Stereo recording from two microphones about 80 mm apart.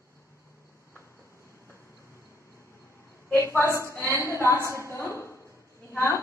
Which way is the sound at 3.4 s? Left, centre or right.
Left.